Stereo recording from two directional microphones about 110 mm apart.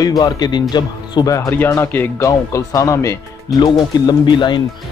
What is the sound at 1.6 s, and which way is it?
Speech, 20° left (ahead or behind).